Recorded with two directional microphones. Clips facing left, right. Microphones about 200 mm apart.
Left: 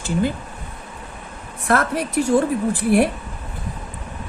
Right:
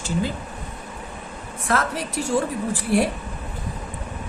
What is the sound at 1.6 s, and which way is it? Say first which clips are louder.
Speech: left 4 dB; 55° left (ahead or behind).